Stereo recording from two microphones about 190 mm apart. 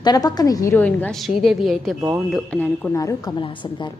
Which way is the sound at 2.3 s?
5° left (ahead or behind).